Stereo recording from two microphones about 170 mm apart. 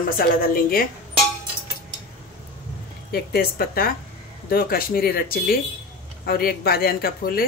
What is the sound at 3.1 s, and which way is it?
Speech, 65° left (ahead or behind).